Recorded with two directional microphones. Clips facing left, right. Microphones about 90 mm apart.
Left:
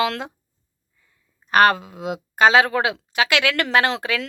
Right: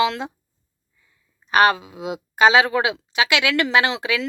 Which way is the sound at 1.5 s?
50° left (ahead or behind).